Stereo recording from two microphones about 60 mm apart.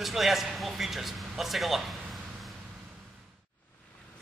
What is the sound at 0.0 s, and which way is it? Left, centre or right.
Speech, centre.